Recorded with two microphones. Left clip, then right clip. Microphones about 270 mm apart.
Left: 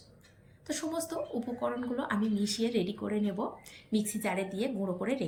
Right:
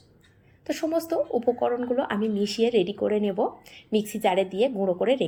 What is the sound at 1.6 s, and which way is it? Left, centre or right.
Speech, right.